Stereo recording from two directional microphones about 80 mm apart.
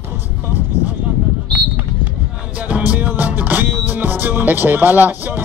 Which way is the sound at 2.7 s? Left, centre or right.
Centre.